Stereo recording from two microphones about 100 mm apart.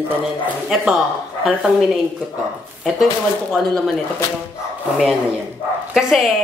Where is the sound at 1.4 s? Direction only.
5° right (ahead or behind).